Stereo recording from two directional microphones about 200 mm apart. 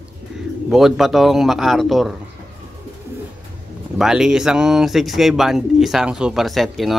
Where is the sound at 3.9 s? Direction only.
Centre (ahead or behind).